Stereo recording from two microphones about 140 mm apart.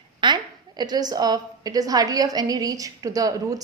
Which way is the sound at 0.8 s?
30° right (ahead or behind).